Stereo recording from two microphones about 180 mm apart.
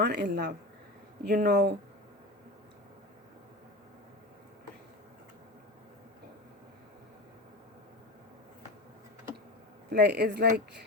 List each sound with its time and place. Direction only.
0.0 s speech: 65° right (ahead or behind)
9.9 s speech: 65° right (ahead or behind)